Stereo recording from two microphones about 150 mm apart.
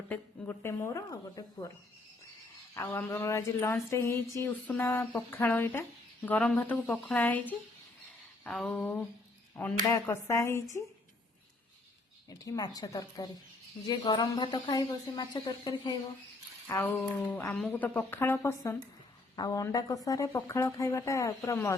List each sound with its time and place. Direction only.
0.1 s speech: 15° left (ahead or behind)
2.7 s a sound: 20° left (ahead or behind)
9.9 s speech: 20° left (ahead or behind)
12.4 s speech: 25° left (ahead or behind)
16.6 s a sound: 15° left (ahead or behind)
19.4 s speech: 25° left (ahead or behind)